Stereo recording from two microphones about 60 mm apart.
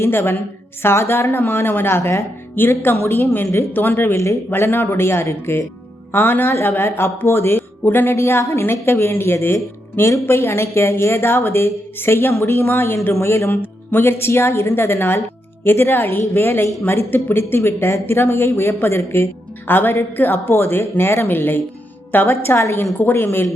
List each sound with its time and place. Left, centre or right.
0.0 s speech: left
19.6 s speech: left